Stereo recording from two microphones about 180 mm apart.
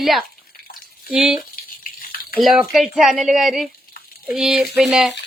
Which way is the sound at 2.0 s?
55° left (ahead or behind).